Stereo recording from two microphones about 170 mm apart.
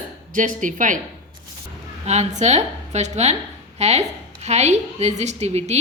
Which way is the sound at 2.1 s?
40° right (ahead or behind).